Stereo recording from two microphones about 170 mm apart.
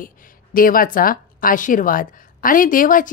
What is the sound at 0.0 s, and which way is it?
A woman's voice, 55° left (ahead or behind).